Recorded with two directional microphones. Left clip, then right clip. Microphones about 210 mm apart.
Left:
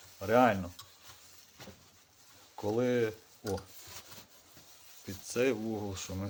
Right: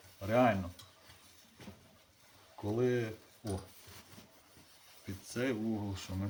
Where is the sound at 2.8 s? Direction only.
55° left (ahead or behind).